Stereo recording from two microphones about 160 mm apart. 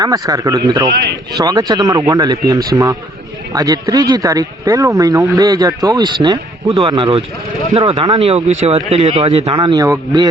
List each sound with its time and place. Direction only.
0.0 s speech: 20° right (ahead or behind)